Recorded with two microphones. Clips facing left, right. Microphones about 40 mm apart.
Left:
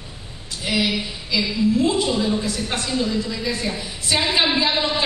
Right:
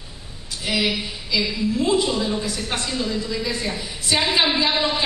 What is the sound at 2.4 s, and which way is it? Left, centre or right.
Speech, right.